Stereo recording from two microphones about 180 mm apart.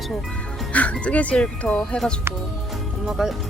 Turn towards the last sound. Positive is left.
turn(degrees=0)  # may be behind; listen again after turning